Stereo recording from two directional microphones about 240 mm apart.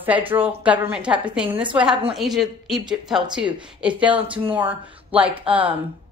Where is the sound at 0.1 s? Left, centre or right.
Centre.